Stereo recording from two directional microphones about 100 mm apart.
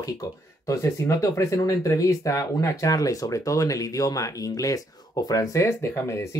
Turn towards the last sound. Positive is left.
turn(degrees=30)  # may be behind; listen again after turning